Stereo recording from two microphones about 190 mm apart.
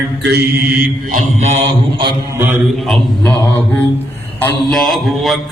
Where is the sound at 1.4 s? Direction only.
30° right (ahead or behind).